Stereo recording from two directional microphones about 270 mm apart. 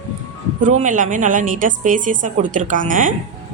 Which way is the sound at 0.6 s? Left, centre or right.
Right.